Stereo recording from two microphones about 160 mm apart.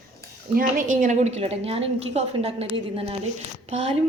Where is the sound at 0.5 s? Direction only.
55° right (ahead or behind).